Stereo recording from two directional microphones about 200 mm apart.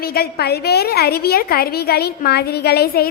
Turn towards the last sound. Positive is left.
turn(degrees=50)  # may be behind; listen again after turning